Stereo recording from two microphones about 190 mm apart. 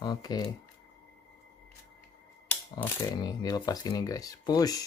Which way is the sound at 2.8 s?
20° left (ahead or behind).